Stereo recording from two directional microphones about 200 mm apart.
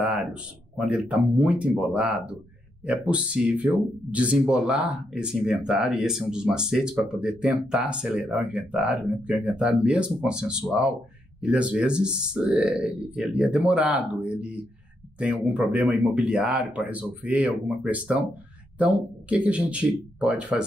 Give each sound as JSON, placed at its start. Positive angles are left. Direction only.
{"t": 0.2, "sound": "speech", "side_deg": -5}